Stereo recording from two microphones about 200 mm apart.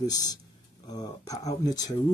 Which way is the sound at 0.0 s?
20° left (ahead or behind).